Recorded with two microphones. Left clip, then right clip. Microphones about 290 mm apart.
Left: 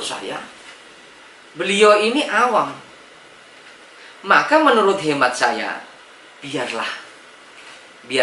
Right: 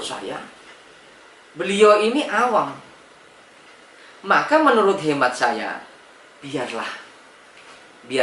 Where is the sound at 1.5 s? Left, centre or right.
Centre.